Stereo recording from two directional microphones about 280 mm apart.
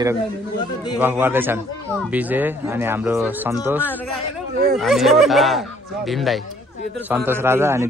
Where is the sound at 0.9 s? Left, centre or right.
Centre.